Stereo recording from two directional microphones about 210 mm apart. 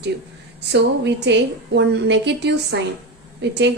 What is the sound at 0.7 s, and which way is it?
A woman's voice, 55° right (ahead or behind).